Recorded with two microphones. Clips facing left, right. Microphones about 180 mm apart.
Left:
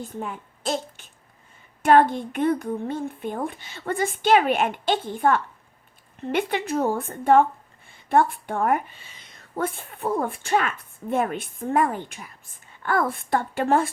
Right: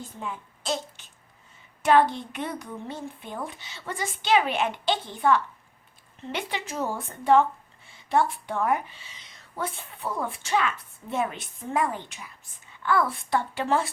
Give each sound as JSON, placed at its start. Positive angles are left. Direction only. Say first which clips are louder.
{"t": 0.2, "sound": "a child's voice", "louder": "left 3 dB", "side_deg": 50}